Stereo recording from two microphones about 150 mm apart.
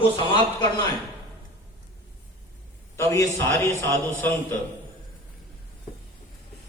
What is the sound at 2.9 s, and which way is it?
A man's voice, 20° left (ahead or behind).